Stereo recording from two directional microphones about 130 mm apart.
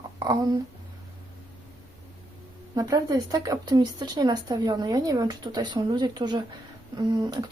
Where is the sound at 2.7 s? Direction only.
25° right (ahead or behind).